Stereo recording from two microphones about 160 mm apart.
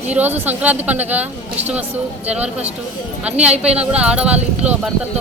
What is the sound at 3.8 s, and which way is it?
Speech, 5° right (ahead or behind).